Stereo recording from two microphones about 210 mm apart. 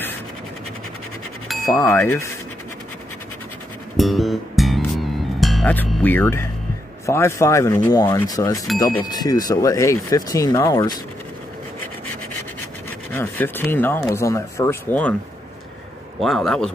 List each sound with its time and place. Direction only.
1.5 s speech: 10° left (ahead or behind)
3.9 s music: centre (ahead or behind)
7.1 s speech: 15° left (ahead or behind)
13.1 s speech: 10° left (ahead or behind)
16.2 s a man's voice: centre (ahead or behind)